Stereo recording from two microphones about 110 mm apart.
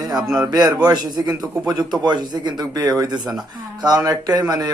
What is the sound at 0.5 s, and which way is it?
A man's voice, 35° right (ahead or behind).